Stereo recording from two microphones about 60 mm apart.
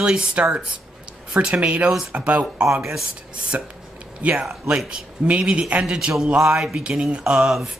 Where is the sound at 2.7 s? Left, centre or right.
Centre.